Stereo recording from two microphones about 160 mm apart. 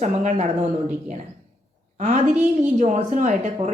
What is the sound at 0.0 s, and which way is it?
Speech, 45° right (ahead or behind).